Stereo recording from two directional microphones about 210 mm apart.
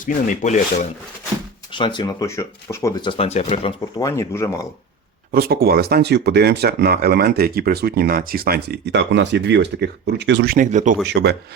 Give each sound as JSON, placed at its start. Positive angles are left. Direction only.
{"t": 0.0, "sound": "speech", "side_deg": 35}
{"t": 1.8, "sound": "speech", "side_deg": 20}
{"t": 5.3, "sound": "speech", "side_deg": -45}
{"t": 11.0, "sound": "speech", "side_deg": -55}